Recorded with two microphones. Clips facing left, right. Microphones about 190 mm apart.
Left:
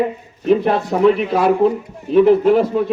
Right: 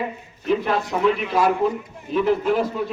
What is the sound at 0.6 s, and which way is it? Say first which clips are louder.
Speech: left 6 dB; 30° left (ahead or behind).